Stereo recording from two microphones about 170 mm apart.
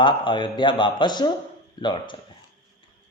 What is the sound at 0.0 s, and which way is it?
A man's voice, 30° left (ahead or behind).